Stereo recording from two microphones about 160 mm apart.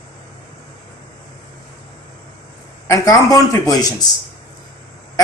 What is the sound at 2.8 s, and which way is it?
Speech, 20° left (ahead or behind).